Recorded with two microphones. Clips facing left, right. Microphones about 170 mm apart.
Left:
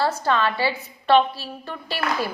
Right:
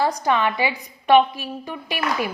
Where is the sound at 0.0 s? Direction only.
15° right (ahead or behind).